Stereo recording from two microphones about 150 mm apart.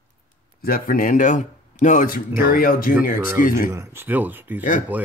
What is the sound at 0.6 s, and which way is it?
Speech, 70° left (ahead or behind).